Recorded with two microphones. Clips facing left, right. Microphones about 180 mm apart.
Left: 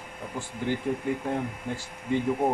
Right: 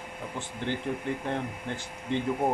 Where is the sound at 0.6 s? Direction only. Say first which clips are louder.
Left 3 dB; 5° left (ahead or behind).